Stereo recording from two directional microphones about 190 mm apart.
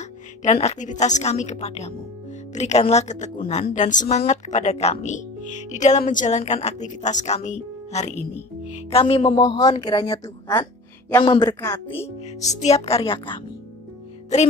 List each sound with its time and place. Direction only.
0.0 s a woman's voice: 40° left (ahead or behind)
9.4 s speech: 20° left (ahead or behind)
12.4 s speech: 35° left (ahead or behind)